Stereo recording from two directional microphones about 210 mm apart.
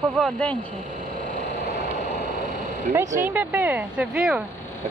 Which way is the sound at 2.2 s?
35° right (ahead or behind).